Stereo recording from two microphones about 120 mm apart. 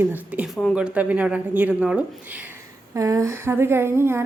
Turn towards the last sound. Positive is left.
turn(degrees=-20)  # may be behind; listen again after turning